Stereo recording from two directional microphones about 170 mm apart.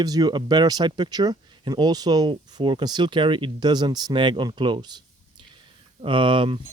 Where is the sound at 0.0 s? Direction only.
20° right (ahead or behind).